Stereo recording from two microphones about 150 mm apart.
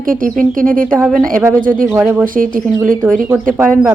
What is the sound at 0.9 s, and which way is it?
Speech, centre (ahead or behind).